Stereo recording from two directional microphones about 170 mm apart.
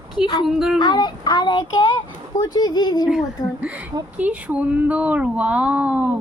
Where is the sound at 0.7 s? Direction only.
25° left (ahead or behind).